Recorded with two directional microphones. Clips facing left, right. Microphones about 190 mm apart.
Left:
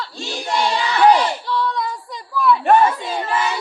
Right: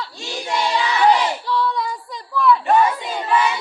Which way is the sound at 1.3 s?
5° right (ahead or behind).